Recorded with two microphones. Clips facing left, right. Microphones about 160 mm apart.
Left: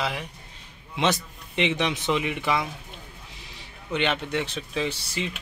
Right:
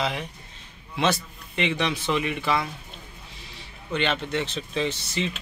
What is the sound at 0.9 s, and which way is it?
Speech, 20° left (ahead or behind).